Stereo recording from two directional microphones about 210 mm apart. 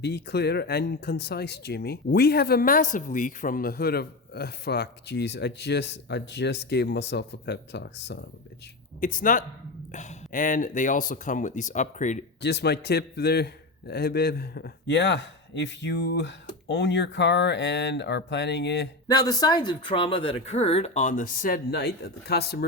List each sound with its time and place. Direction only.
0.0 s speech: 50° left (ahead or behind)
9.0 s a man's voice: 40° left (ahead or behind)
12.4 s a man's voice: 55° left (ahead or behind)
19.0 s speech: 20° left (ahead or behind); by 22.6 s 50° left (ahead or behind)